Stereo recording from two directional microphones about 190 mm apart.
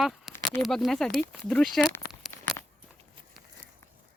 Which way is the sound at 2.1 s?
Centre (ahead or behind).